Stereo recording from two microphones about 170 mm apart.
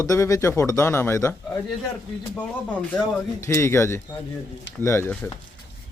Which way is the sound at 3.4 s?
15° left (ahead or behind).